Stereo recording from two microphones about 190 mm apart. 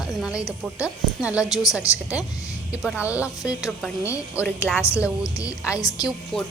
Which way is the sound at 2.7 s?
Centre (ahead or behind).